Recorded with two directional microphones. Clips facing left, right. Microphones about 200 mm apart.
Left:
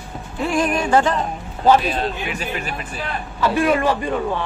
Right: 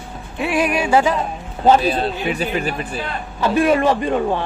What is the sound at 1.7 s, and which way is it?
A man's voice, 35° right (ahead or behind).